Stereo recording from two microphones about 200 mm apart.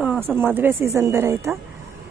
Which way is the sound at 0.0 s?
5° right (ahead or behind).